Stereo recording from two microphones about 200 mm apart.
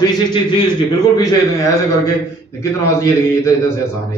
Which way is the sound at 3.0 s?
15° left (ahead or behind).